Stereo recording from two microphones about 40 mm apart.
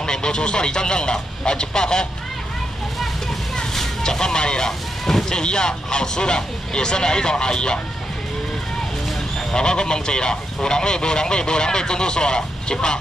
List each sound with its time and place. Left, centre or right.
0.0 s a man's voice: centre
3.7 s speech: centre
9.5 s speech: left